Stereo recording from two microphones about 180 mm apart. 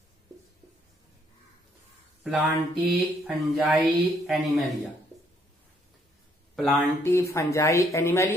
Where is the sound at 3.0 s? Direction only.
5° right (ahead or behind).